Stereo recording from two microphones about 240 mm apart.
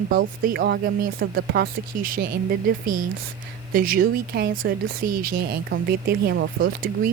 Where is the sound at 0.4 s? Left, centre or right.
Right.